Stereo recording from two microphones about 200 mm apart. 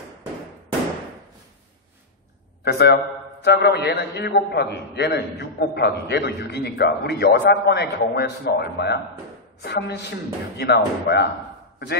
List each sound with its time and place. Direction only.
2.6 s a man's voice: 55° left (ahead or behind)